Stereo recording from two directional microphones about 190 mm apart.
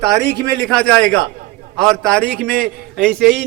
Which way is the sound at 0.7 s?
5° left (ahead or behind).